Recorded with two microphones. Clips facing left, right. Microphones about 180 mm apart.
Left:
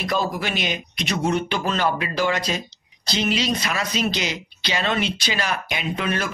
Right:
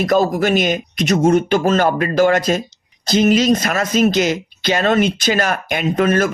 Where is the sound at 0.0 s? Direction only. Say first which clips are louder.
Right 9 dB; 45° right (ahead or behind).